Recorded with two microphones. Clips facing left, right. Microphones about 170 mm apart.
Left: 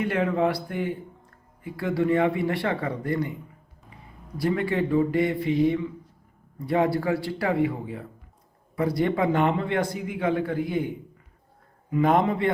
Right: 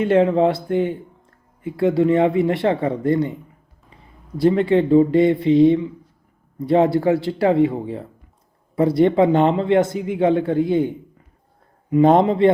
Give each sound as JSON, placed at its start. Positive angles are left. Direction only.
{"t": 0.0, "sound": "speech", "side_deg": -25}
{"t": 4.4, "sound": "speech", "side_deg": -25}